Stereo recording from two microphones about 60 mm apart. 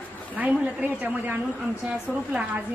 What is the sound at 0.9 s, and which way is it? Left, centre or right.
A woman's voice, centre.